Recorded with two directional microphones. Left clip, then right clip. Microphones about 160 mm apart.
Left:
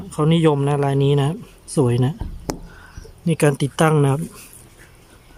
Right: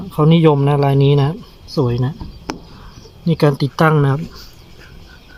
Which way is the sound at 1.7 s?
20° left (ahead or behind).